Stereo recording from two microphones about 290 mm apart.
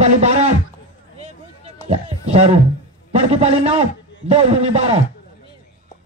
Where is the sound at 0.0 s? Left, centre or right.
Right.